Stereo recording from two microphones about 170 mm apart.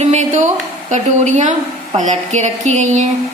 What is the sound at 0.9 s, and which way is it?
A woman's voice, 45° right (ahead or behind).